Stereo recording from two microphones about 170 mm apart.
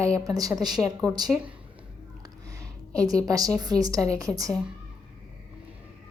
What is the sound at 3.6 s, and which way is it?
Speech, 20° right (ahead or behind).